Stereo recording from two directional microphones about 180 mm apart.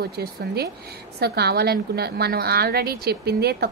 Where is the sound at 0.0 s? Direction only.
60° right (ahead or behind).